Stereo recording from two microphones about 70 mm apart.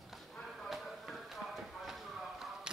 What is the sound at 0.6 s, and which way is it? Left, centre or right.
Chop, centre.